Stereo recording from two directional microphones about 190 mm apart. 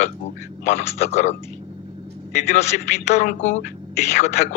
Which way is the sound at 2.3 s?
35° left (ahead or behind).